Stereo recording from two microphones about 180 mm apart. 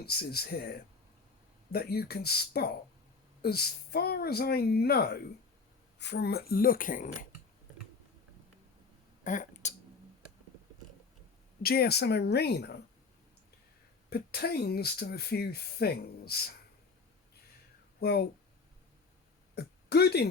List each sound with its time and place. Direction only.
0.0 s speech: 60° left (ahead or behind)
9.2 s speech: 45° left (ahead or behind)
11.6 s speech: 60° left (ahead or behind)
14.1 s speech: 60° left (ahead or behind)
18.0 s speech: 60° left (ahead or behind)
19.5 s throat clearing: 60° left (ahead or behind)